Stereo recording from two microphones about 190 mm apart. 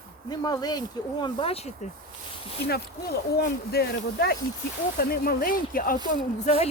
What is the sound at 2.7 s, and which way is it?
Speech, 55° left (ahead or behind).